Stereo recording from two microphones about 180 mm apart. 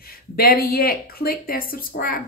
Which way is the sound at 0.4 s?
55° left (ahead or behind).